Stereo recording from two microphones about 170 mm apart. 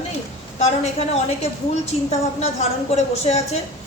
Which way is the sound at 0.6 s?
40° left (ahead or behind).